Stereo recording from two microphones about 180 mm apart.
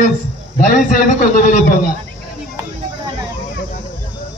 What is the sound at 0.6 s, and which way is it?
A man's voice, 45° left (ahead or behind).